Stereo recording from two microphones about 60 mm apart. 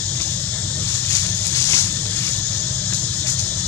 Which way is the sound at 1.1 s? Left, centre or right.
Left.